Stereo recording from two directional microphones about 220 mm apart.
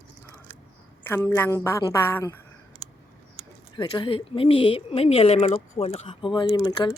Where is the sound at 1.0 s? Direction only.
10° left (ahead or behind).